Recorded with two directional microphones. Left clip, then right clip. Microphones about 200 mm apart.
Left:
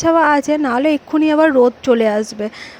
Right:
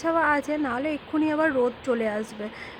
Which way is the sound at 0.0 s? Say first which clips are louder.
Left 10 dB; 45° left (ahead or behind).